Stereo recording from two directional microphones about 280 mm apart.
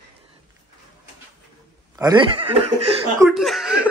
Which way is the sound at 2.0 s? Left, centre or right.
Centre.